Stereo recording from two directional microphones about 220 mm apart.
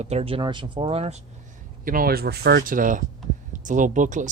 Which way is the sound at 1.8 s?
40° right (ahead or behind).